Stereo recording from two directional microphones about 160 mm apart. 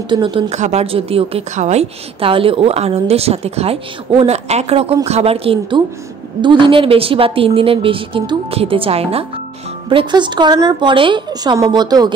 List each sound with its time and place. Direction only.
0.1 s a woman's voice: 30° right (ahead or behind)